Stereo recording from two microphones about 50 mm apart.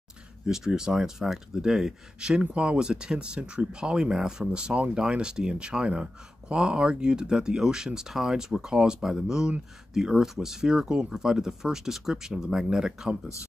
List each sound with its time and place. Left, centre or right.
0.5 s speech: centre